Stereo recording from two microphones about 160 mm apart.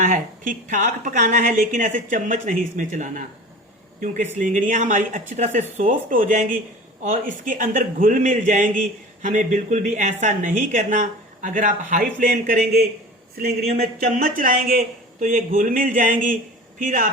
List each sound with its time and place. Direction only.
0.0 s a woman's voice: 55° right (ahead or behind)
4.4 s a man's voice: 55° right (ahead or behind)